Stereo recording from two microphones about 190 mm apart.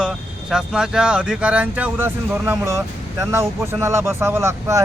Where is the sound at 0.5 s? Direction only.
5° right (ahead or behind).